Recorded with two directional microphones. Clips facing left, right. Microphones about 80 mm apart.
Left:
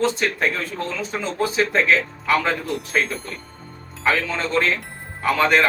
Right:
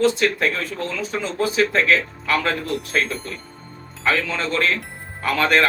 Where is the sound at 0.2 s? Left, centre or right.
Left.